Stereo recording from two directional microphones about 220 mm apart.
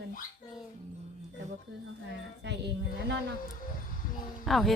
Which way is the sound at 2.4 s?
50° right (ahead or behind).